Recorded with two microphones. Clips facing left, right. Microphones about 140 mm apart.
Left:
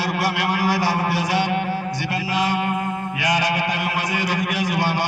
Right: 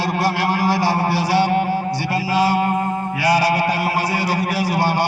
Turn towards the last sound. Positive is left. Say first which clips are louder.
# right 3 dB
turn(degrees=-30)  # may be behind; listen again after turning